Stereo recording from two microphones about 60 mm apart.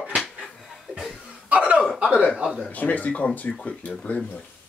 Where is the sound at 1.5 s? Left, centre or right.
Centre.